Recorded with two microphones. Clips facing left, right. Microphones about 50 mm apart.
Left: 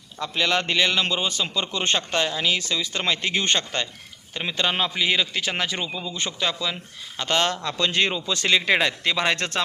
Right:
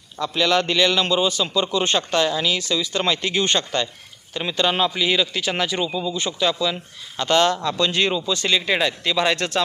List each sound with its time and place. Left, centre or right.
0.2 s a man's voice: left
4.4 s a man's voice: centre
8.3 s a man's voice: left
9.1 s speech: left